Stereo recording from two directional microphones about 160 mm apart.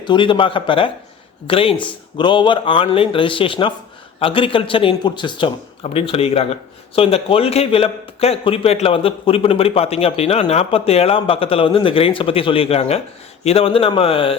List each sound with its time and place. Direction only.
0.0 s speech: 30° left (ahead or behind)